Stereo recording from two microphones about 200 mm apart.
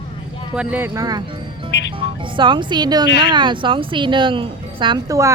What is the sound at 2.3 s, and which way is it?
Speech, 25° right (ahead or behind).